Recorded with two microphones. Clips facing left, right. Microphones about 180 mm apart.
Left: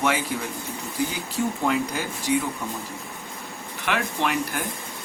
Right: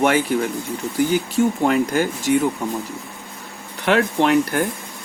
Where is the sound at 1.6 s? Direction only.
65° right (ahead or behind).